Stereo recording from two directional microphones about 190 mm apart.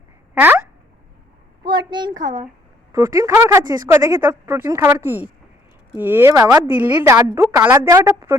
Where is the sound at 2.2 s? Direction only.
45° right (ahead or behind).